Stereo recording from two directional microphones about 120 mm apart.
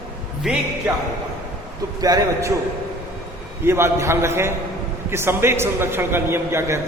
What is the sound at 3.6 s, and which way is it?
A man's voice, 20° right (ahead or behind).